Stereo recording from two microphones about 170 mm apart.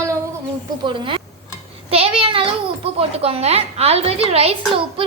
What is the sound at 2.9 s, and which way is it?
A woman's voice, 35° right (ahead or behind).